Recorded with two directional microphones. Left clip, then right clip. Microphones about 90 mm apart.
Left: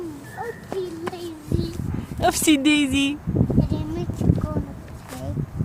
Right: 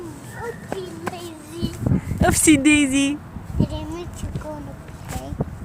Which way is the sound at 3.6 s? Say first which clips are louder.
Even; 25° left (ahead or behind).